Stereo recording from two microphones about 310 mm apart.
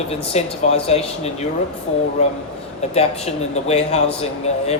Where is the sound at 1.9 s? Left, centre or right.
Left.